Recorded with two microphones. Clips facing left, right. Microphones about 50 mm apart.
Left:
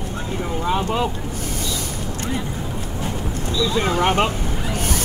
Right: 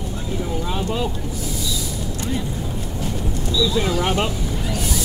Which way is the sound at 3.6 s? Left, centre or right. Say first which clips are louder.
Left 1 dB; left.